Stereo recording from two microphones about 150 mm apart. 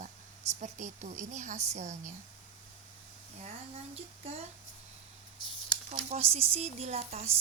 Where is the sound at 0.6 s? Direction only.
55° right (ahead or behind).